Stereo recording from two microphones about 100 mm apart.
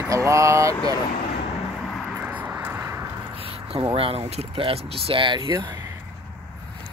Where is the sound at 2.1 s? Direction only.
15° right (ahead or behind).